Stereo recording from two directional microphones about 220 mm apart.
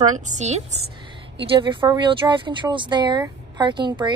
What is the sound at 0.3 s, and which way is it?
A woman's voice, 30° right (ahead or behind).